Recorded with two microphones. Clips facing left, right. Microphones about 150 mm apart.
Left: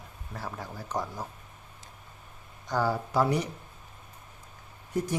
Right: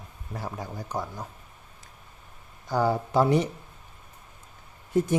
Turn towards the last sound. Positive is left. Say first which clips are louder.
# right 6 dB
turn(degrees=-25)  # may be behind; listen again after turning